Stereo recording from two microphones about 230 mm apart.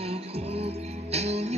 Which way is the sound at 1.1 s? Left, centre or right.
Right.